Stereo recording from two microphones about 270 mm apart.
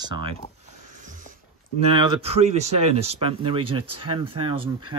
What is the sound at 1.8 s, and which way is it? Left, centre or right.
Speech, centre.